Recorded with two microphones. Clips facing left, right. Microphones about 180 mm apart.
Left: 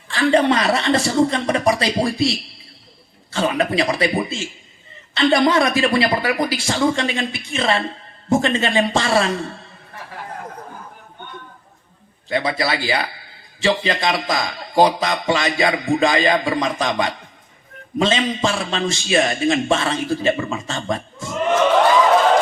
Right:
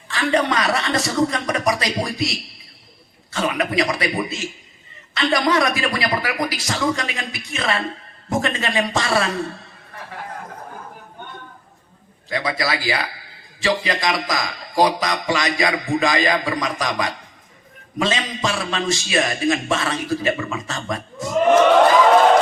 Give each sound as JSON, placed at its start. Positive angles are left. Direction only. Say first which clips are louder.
{"t": 0.1, "sound": "a man's voice", "louder": "left 4 dB", "side_deg": 30}
{"t": 12.3, "sound": "a man's voice", "louder": "left 2 dB", "side_deg": 30}